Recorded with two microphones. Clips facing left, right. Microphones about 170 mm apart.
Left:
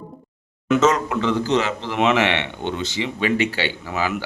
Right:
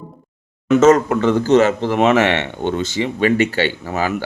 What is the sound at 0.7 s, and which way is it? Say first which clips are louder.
Speech: right 6 dB; 50° right (ahead or behind).